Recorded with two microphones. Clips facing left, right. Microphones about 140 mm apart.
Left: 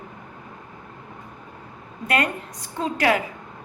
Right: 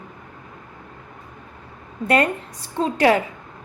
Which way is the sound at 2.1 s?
30° right (ahead or behind).